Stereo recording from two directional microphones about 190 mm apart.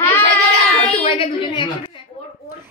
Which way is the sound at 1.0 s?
25° left (ahead or behind).